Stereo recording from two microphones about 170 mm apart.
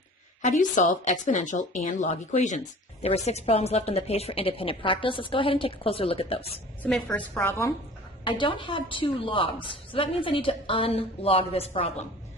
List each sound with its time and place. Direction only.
0.6 s a woman's voice: 45° left (ahead or behind)
6.8 s a woman's voice: 5° left (ahead or behind)
8.2 s a woman's voice: 30° left (ahead or behind)